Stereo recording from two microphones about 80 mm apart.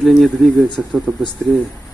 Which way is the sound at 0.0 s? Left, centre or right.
Centre.